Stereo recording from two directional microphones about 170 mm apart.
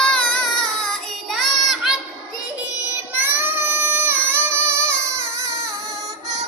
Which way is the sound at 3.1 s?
10° right (ahead or behind).